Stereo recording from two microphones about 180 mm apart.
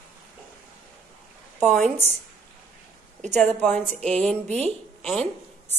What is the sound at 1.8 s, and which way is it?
Speech, 40° right (ahead or behind).